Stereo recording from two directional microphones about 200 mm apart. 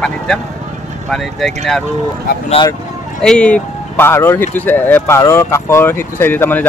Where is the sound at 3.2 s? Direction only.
5° left (ahead or behind).